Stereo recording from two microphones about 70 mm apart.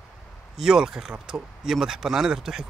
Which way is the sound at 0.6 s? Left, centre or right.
Centre.